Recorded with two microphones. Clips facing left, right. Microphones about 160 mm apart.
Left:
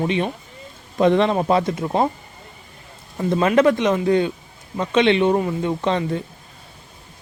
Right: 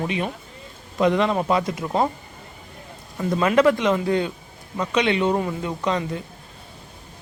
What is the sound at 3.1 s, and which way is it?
Speech, 25° left (ahead or behind).